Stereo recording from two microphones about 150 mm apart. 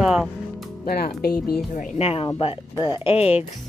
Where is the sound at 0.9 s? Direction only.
90° left.